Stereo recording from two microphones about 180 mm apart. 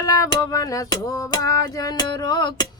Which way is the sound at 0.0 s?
20° left (ahead or behind).